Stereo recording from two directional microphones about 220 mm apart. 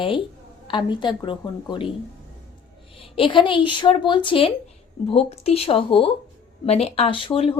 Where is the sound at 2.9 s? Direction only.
25° left (ahead or behind).